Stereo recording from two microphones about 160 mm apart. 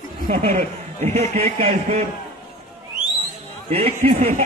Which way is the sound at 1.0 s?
45° right (ahead or behind).